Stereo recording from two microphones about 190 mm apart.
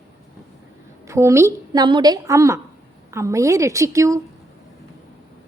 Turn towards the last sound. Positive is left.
turn(degrees=-15)  # may be behind; listen again after turning